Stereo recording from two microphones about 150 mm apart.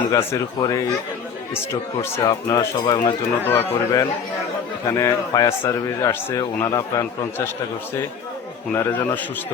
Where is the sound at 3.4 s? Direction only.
15° left (ahead or behind).